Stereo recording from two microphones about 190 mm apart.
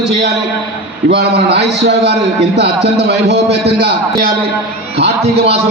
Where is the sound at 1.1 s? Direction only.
60° right (ahead or behind).